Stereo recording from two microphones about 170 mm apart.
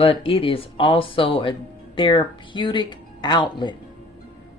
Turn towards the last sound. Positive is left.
turn(degrees=25)  # may be behind; listen again after turning